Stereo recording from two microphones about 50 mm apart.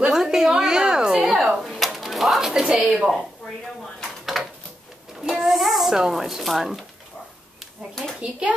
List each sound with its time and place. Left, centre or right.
0.1 s a sound: centre
1.6 s typewriter: centre
2.5 s a woman's voice: centre
4.4 s a sound: centre
5.2 s speech: centre
8.2 s a child's voice: right